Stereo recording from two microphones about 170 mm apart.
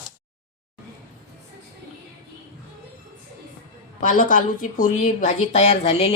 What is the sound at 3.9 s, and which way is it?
A woman's voice, 50° left (ahead or behind).